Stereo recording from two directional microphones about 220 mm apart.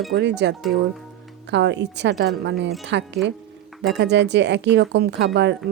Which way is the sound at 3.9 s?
50° right (ahead or behind).